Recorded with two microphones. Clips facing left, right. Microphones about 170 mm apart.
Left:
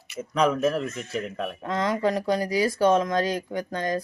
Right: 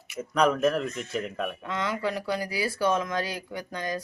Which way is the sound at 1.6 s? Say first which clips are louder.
Left 7 dB; 40° left (ahead or behind).